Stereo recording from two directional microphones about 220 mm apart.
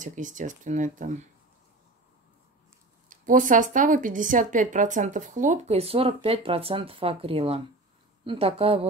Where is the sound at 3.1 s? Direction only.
35° right (ahead or behind).